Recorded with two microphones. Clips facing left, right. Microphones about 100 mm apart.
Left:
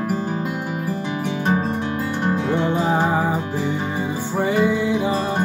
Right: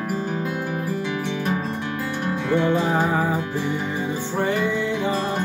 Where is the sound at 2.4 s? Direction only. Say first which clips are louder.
Right 3 dB; 20° left (ahead or behind).